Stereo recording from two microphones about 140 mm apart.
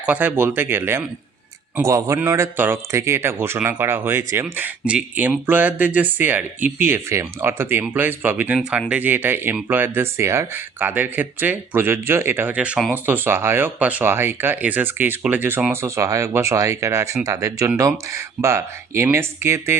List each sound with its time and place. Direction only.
0.0 s a man's voice: 10° right (ahead or behind)